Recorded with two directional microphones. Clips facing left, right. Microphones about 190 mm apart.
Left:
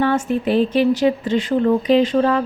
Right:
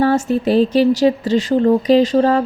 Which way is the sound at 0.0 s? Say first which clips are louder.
Right 3 dB; 40° right (ahead or behind).